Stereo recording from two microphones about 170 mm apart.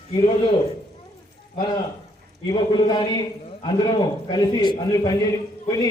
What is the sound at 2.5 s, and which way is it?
A man's voice, 25° left (ahead or behind).